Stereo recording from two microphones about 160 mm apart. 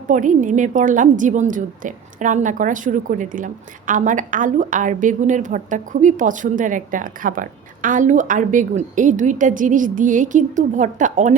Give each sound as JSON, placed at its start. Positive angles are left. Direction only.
{"t": 0.1, "sound": "a woman's voice", "side_deg": -55}